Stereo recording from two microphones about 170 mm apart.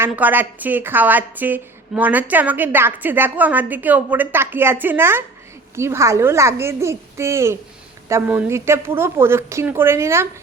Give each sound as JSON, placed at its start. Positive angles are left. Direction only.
{"t": 0.0, "sound": "a woman's voice", "side_deg": -10}